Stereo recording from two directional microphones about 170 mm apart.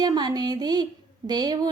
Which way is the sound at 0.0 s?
25° right (ahead or behind).